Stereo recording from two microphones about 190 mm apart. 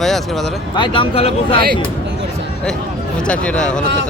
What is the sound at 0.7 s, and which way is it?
Speech, 25° left (ahead or behind).